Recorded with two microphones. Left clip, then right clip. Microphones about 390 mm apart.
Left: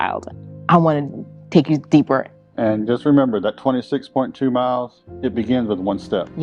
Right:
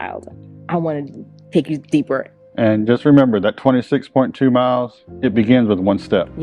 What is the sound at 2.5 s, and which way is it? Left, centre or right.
Speech, right.